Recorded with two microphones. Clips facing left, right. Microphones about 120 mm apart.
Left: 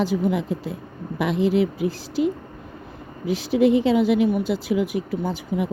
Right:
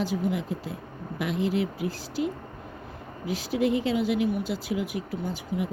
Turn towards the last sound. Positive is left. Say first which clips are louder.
# left 5 dB
turn(degrees=70)  # may be behind; listen again after turning